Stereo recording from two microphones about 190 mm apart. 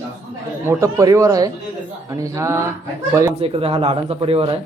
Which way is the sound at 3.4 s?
30° right (ahead or behind).